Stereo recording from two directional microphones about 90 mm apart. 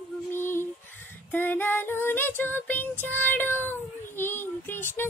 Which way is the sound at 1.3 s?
20° left (ahead or behind).